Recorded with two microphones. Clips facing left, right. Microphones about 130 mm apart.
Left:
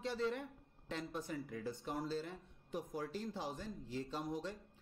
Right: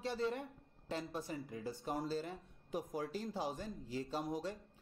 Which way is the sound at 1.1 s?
35° right (ahead or behind).